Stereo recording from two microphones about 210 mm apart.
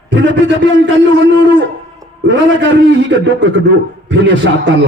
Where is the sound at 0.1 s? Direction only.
60° right (ahead or behind).